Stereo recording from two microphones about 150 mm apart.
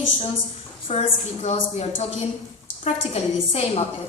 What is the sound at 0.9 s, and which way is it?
A woman's voice, 45° left (ahead or behind).